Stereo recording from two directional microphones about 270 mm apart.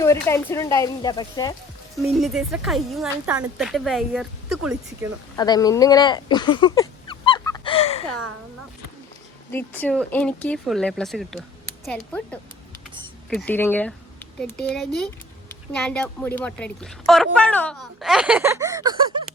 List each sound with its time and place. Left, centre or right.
0.0 s speech: centre
2.1 s speech: centre
5.4 s a sound: centre
9.5 s speech: centre